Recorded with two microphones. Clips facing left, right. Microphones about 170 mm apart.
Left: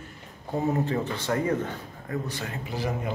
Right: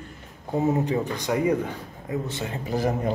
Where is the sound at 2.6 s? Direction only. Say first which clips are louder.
Right 7 dB; 45° right (ahead or behind).